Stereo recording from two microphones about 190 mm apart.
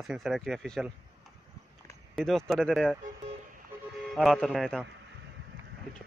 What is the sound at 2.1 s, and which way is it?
Speech, centre (ahead or behind).